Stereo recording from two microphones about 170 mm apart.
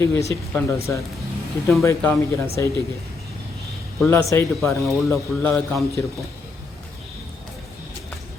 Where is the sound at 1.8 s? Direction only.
15° left (ahead or behind).